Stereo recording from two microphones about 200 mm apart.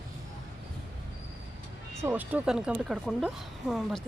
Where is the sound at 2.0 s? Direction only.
10° right (ahead or behind).